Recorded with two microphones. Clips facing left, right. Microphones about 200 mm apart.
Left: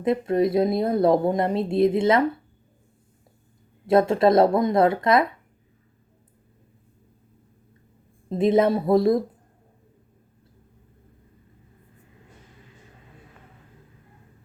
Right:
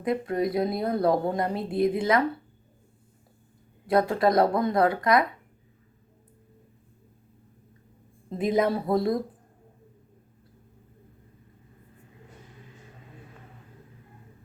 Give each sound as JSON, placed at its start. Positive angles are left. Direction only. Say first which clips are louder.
{"t": 0.0, "sound": "a woman's voice", "louder": "left 5 dB", "side_deg": 25}
{"t": 3.8, "sound": "a woman's voice", "louder": "left 5 dB", "side_deg": 25}
{"t": 8.3, "sound": "a woman's voice", "louder": "left 5 dB", "side_deg": 25}